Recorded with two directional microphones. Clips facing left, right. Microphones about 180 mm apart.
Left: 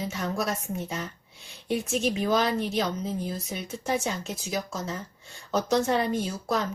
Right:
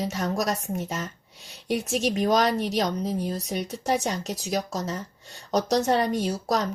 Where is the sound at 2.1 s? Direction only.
40° right (ahead or behind).